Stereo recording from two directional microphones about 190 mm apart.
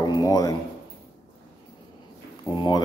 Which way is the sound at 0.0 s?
20° left (ahead or behind).